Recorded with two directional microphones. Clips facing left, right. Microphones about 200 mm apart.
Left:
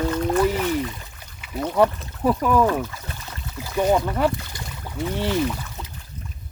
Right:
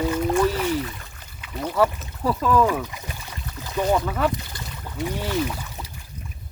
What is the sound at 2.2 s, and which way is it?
Speech, 15° left (ahead or behind).